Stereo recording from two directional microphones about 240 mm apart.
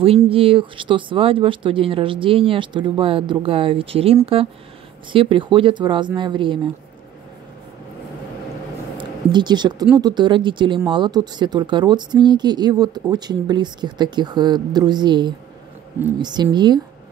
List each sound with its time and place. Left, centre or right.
0.0 s speech: right
9.3 s speech: centre